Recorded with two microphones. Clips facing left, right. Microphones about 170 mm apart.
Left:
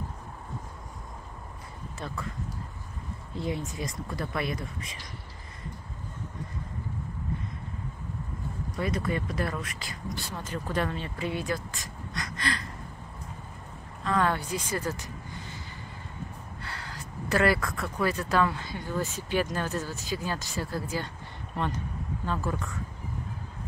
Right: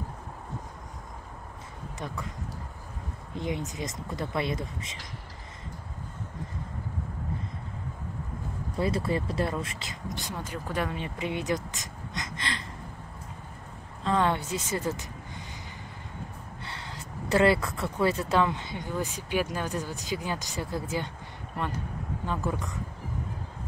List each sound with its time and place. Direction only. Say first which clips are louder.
2.0 s speech: even; 15° right (ahead or behind)
3.3 s speech: even; 20° right (ahead or behind)
8.7 s speech: right 2 dB; 30° right (ahead or behind)
14.0 s speech: right 1 dB; 20° right (ahead or behind)
16.6 s speech: even; 25° right (ahead or behind)
21.5 s speech: left 1 dB; 10° right (ahead or behind)